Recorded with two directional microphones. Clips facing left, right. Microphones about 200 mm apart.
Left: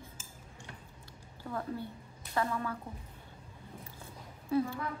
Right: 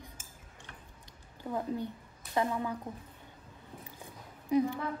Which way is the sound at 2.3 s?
20° right (ahead or behind).